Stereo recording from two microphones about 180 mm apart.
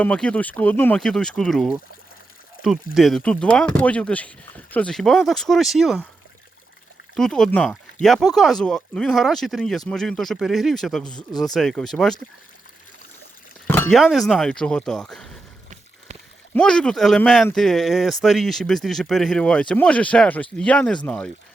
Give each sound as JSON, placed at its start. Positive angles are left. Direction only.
{"t": 0.0, "sound": "speech", "side_deg": 5}
{"t": 7.2, "sound": "speech", "side_deg": 5}
{"t": 11.3, "sound": "speech", "side_deg": 20}
{"t": 11.5, "sound": "speech", "side_deg": 0}
{"t": 13.7, "sound": "a sound", "side_deg": 10}
{"t": 14.0, "sound": "speech", "side_deg": 0}
{"t": 16.6, "sound": "speech", "side_deg": 5}